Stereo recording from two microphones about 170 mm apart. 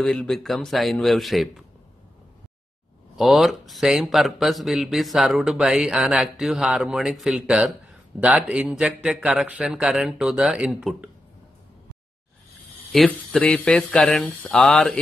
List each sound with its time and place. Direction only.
0.0 s a man's voice: centre (ahead or behind)
3.2 s a man's voice: centre (ahead or behind)
12.9 s a man's voice: centre (ahead or behind)